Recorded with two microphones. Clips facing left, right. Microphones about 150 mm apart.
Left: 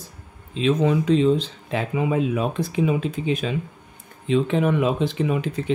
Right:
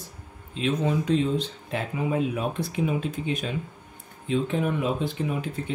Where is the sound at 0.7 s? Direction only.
90° left.